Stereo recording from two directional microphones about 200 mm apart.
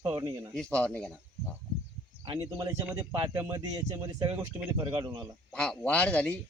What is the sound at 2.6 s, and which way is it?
A man's voice, 15° right (ahead or behind).